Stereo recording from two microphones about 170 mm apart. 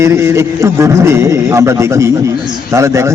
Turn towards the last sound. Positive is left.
turn(degrees=-15)  # may be behind; listen again after turning